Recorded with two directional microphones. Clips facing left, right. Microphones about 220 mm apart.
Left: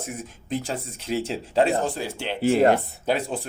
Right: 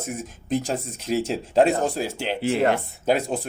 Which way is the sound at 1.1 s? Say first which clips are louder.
Right 3 dB; 45° right (ahead or behind).